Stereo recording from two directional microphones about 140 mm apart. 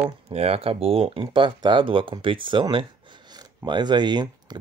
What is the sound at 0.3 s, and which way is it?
Speech, 45° right (ahead or behind).